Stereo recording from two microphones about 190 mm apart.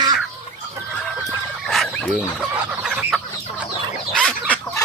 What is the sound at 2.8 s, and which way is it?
Chicken, 5° right (ahead or behind).